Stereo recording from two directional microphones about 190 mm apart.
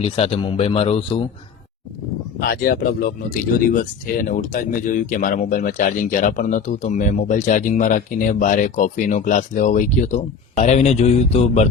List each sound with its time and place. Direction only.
0.0 s speech: 30° left (ahead or behind)
2.4 s speech: 50° left (ahead or behind); by 11.7 s 35° left (ahead or behind)